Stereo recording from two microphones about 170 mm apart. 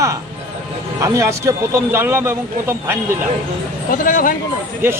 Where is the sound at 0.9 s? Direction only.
15° right (ahead or behind).